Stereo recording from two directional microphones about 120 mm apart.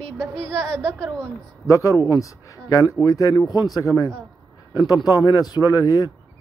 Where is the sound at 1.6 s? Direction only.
25° left (ahead or behind).